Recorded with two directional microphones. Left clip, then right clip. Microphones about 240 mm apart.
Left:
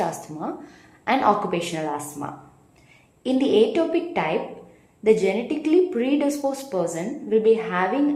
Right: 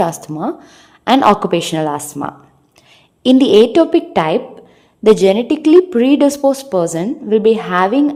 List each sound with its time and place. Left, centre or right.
0.0 s speech: right